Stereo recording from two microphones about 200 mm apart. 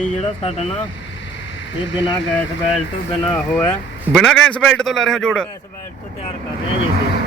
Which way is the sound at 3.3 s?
10° left (ahead or behind).